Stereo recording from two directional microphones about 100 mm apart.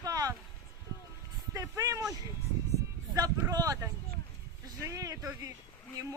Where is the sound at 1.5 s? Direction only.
35° right (ahead or behind).